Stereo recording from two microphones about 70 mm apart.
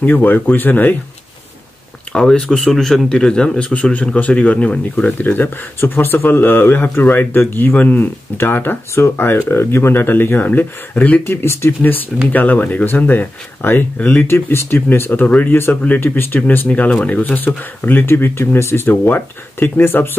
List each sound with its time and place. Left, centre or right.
0.0 s a man's voice: left
2.1 s a man's voice: centre; by 11.1 s left
11.2 s a man's voice: left
14.3 s a man's voice: left